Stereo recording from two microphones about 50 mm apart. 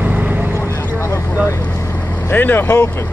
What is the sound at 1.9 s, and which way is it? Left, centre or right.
Vehicle, left.